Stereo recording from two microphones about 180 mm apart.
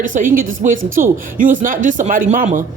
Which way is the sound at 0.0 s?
45° right (ahead or behind).